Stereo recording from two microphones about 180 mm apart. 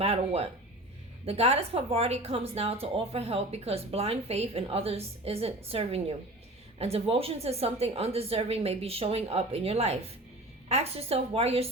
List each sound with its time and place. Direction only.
0.0 s speech: 35° right (ahead or behind)